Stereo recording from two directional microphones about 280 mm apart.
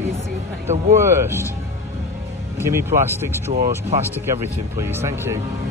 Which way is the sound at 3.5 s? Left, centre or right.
Right.